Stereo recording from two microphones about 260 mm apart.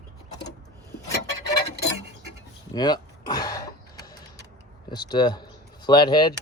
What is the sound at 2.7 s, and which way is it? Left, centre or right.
Throat clearing, centre.